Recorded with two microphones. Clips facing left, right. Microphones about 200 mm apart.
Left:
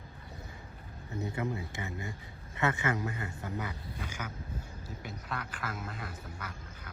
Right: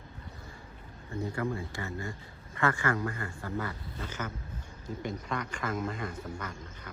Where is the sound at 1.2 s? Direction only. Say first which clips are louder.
Right 2 dB; 20° left (ahead or behind); by 6.9 s 5° left (ahead or behind).